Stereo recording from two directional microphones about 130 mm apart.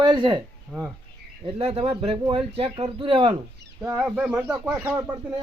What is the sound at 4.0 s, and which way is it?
Speech, 10° right (ahead or behind).